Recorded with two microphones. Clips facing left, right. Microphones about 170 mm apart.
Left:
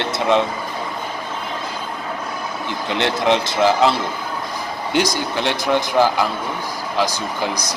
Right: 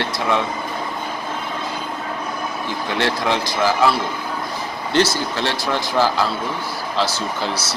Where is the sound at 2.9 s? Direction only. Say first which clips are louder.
Left 3 dB; 20° left (ahead or behind).